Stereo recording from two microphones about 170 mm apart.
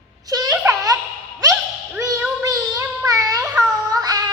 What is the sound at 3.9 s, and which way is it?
Cat, 25° right (ahead or behind).